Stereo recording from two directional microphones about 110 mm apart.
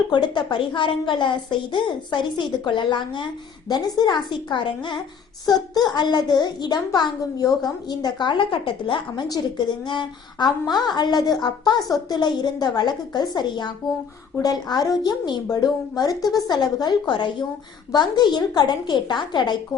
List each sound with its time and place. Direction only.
0.1 s a woman's voice: 45° left (ahead or behind)